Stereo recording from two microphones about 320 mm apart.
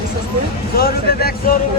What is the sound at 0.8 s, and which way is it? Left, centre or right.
Speech, left.